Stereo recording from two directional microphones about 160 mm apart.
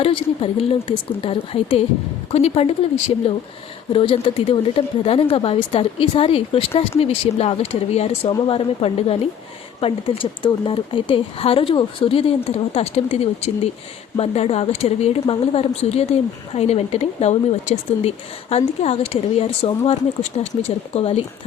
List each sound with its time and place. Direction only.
0.0 s speech: 35° left (ahead or behind)